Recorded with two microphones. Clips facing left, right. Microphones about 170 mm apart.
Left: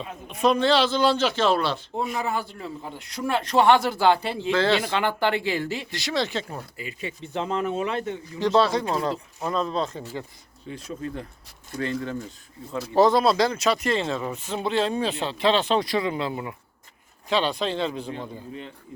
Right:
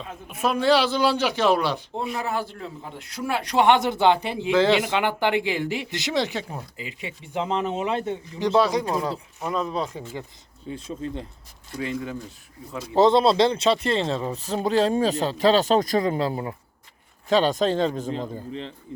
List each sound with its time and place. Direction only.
0.0 s a man's voice: 5° right (ahead or behind)
2.0 s a man's voice: centre (ahead or behind); by 8.4 s 25° right (ahead or behind)
8.4 s a man's voice: 15° right (ahead or behind)
10.7 s speech: 25° right (ahead or behind)
11.8 s a man's voice: 10° right (ahead or behind)
12.9 s speech: 25° right (ahead or behind); by 18.1 s 45° right (ahead or behind)